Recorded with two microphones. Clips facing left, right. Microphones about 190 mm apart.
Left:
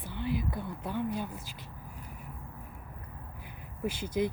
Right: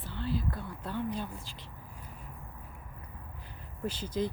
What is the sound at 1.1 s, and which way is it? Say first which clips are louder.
Speech: left 2 dB; 15° left (ahead or behind).